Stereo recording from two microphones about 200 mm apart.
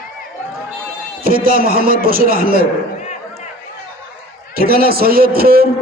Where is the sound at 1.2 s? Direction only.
45° right (ahead or behind).